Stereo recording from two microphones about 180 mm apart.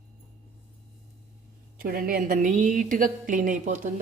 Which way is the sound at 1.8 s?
55° right (ahead or behind).